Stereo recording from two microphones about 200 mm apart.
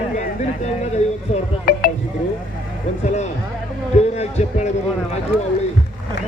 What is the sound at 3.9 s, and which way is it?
Speech, 35° left (ahead or behind).